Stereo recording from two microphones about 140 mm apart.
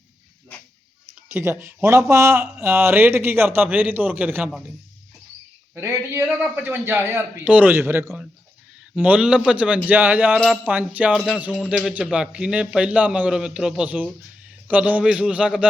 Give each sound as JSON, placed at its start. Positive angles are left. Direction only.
{"t": 1.3, "sound": "speech", "side_deg": -15}
{"t": 5.7, "sound": "a man's voice", "side_deg": -20}